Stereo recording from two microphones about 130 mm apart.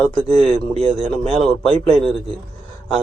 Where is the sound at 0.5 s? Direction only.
50° right (ahead or behind).